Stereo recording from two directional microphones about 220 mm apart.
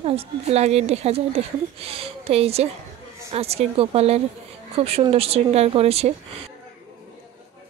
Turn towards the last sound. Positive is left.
turn(degrees=-25)  # may be behind; listen again after turning